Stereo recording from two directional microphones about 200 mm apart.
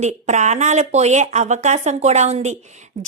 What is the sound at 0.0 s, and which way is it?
A woman's voice, 35° right (ahead or behind).